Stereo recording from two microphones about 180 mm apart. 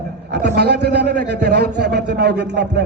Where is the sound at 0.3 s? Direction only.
65° right (ahead or behind).